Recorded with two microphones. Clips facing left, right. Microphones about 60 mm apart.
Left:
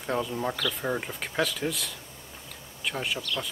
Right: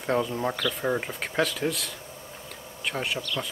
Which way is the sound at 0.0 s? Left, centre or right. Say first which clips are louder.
Right 3 dB; centre.